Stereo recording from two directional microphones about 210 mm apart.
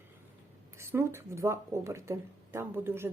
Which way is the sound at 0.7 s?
10° right (ahead or behind).